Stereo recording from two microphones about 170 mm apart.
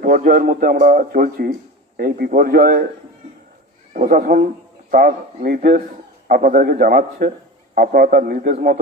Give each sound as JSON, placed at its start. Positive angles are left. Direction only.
{"t": 0.0, "sound": "a man's voice", "side_deg": -55}
{"t": 3.9, "sound": "a man's voice", "side_deg": -55}